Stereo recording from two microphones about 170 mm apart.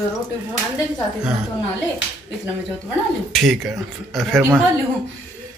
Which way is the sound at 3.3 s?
Centre (ahead or behind).